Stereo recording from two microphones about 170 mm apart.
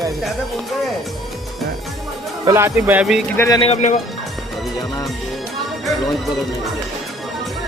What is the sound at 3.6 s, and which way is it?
Speech, 40° left (ahead or behind).